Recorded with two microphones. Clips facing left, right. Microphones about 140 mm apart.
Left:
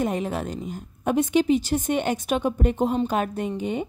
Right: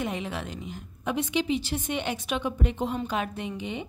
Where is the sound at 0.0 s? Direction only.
45° left (ahead or behind).